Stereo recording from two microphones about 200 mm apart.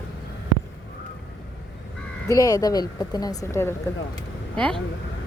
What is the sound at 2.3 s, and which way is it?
A woman's voice, 20° left (ahead or behind).